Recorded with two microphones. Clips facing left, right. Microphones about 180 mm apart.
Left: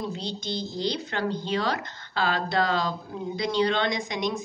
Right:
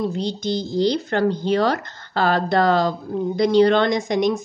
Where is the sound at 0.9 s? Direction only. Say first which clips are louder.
Right 9 dB; 50° right (ahead or behind).